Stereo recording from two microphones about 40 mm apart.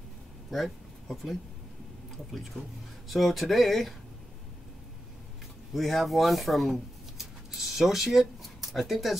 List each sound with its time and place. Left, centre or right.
0.5 s speech: centre
2.6 s speech: right
3.1 s speech: centre
5.8 s speech: centre
7.2 s a sound: centre